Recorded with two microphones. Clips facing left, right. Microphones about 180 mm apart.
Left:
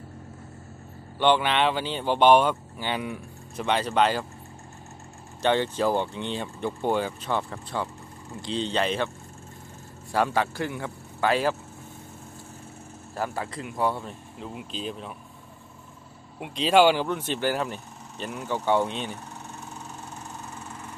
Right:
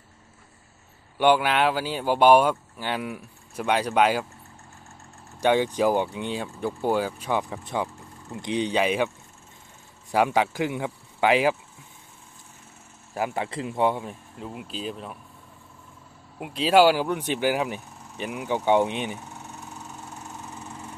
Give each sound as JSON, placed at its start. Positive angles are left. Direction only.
{"t": 1.2, "sound": "speech", "side_deg": -10}
{"t": 5.4, "sound": "speech", "side_deg": -10}
{"t": 10.1, "sound": "speech", "side_deg": -15}
{"t": 13.1, "sound": "speech", "side_deg": -15}
{"t": 14.0, "sound": "speech", "side_deg": 0}
{"t": 16.3, "sound": "speech", "side_deg": -5}